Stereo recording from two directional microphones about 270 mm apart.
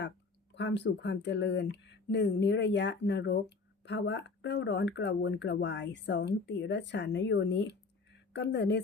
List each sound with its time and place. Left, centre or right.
0.5 s speech: left